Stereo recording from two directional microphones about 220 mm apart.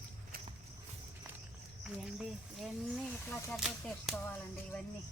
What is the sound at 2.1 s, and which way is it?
Speech, centre (ahead or behind).